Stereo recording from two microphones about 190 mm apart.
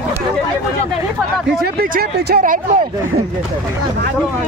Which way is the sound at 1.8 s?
50° right (ahead or behind).